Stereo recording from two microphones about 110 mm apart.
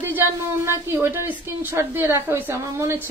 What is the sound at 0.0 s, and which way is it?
Speech, 20° right (ahead or behind).